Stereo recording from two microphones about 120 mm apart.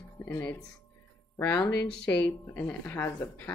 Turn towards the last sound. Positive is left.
turn(degrees=15)  # may be behind; listen again after turning